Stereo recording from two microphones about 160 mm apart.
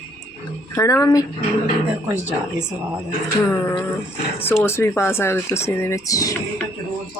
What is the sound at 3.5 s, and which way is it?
Speech, 15° left (ahead or behind).